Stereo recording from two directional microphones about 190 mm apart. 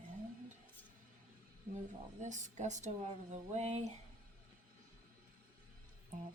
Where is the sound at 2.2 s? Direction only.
40° right (ahead or behind).